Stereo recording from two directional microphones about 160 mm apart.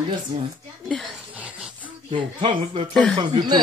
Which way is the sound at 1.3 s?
5° right (ahead or behind).